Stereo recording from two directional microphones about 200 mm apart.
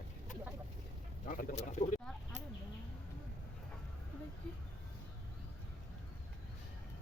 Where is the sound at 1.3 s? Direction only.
45° left (ahead or behind).